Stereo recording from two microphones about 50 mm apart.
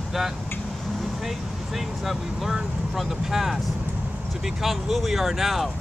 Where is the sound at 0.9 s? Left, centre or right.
Centre.